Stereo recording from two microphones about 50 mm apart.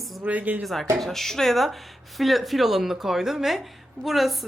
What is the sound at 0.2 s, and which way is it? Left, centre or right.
Speech, right.